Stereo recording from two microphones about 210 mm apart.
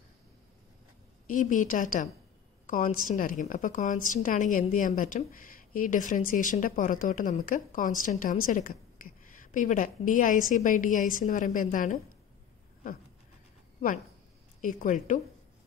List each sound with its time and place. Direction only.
1.3 s a woman's voice: 40° left (ahead or behind)
2.6 s a sound: 40° left (ahead or behind)
3.1 s a woman's voice: 40° left (ahead or behind)
14.6 s a woman's voice: 40° left (ahead or behind)